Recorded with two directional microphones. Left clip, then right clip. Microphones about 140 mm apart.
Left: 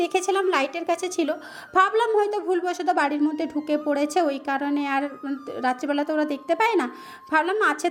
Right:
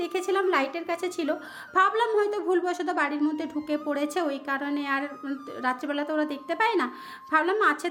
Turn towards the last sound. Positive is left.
turn(degrees=30)  # may be behind; listen again after turning